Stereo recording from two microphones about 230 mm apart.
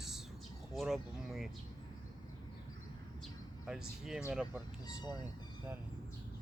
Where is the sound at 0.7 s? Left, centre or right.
Centre.